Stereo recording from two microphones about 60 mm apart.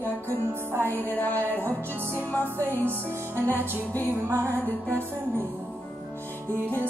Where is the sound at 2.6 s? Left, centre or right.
Right.